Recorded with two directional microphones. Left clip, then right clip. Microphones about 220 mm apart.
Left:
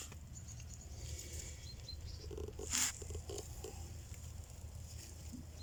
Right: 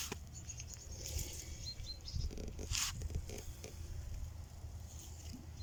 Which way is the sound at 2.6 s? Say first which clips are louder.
Left 1 dB; 35° left (ahead or behind).